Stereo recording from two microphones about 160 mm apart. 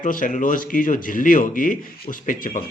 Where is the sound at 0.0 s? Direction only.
55° left (ahead or behind).